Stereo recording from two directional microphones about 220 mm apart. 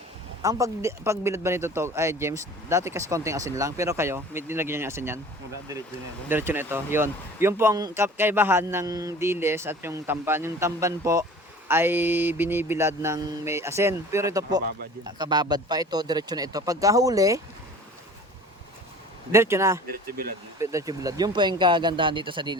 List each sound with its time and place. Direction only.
0.4 s speech: 15° right (ahead or behind)
6.2 s speech: 10° right (ahead or behind)
19.3 s speech: 10° right (ahead or behind)